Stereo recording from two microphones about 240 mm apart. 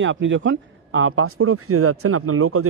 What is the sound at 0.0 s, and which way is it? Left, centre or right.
Speech, right.